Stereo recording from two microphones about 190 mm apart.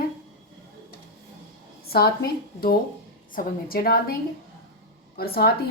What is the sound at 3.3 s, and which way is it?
A woman's voice, 50° left (ahead or behind).